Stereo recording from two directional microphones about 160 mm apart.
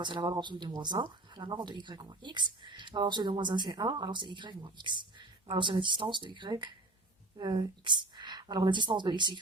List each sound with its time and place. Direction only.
0.0 s speech: 30° right (ahead or behind)